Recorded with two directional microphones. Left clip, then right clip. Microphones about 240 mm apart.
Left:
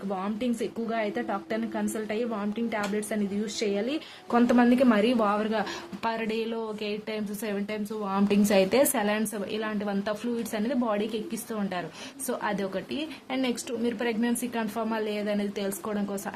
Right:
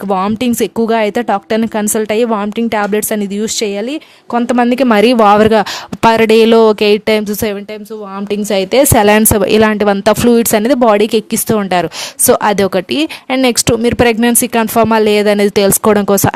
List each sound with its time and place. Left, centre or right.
0.1 s a woman's voice: right
8.3 s a woman's voice: right